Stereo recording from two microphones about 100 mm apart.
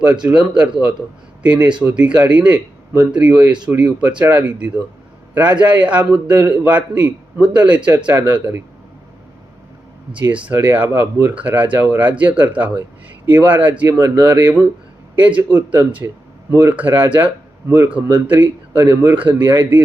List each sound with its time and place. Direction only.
0.0 s speech: 15° right (ahead or behind)
10.2 s speech: 15° right (ahead or behind)